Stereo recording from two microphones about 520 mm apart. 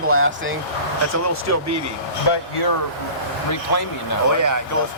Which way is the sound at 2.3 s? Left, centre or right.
Left.